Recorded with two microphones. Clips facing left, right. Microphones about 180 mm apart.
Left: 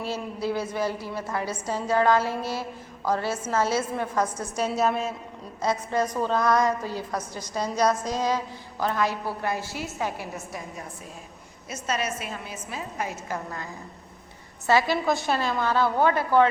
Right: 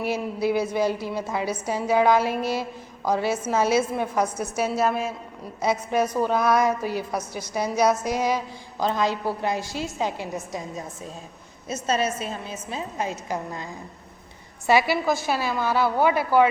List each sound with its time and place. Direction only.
0.0 s a woman's voice: 15° right (ahead or behind)
14.7 s a woman's voice: 10° right (ahead or behind)